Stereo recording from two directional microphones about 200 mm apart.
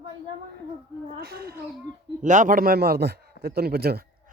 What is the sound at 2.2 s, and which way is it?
A man's voice, 40° right (ahead or behind).